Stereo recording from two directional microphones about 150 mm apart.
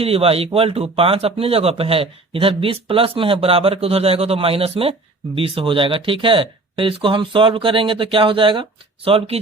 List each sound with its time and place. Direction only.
0.0 s a man's voice: 40° right (ahead or behind)